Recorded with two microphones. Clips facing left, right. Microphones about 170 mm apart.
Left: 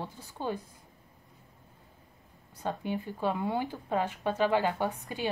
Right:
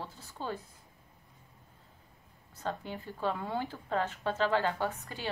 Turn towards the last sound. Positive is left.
turn(degrees=15)  # may be behind; listen again after turning